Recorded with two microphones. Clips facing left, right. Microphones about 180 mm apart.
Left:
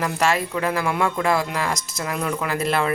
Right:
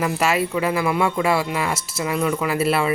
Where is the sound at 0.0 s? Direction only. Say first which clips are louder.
Right 1 dB; 5° right (ahead or behind).